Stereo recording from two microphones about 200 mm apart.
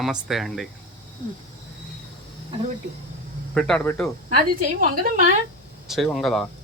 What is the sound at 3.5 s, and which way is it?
Speech, 5° left (ahead or behind).